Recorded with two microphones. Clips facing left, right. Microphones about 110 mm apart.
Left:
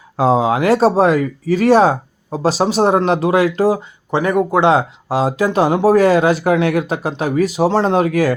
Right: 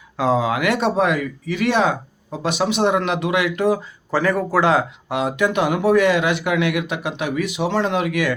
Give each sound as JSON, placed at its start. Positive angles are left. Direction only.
{"t": 0.2, "sound": "speech", "side_deg": 30}